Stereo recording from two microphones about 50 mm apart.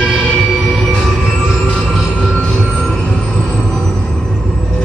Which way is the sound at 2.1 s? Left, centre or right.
Left.